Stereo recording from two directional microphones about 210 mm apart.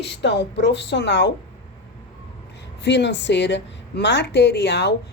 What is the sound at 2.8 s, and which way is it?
A woman's voice, 55° left (ahead or behind).